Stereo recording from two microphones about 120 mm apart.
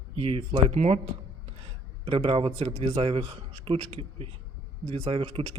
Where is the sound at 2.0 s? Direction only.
50° right (ahead or behind).